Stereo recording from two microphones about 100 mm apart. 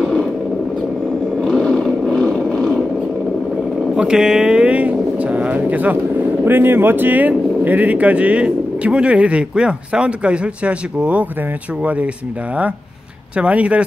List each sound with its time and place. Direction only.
0.0 s a sound: 5° left (ahead or behind)
1.4 s roar: 5° left (ahead or behind)
3.9 s speech: 5° right (ahead or behind)
13.4 s speech: 15° right (ahead or behind)